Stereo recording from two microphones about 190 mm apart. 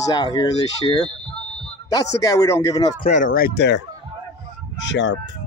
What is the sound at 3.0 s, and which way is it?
Speech, 45° left (ahead or behind).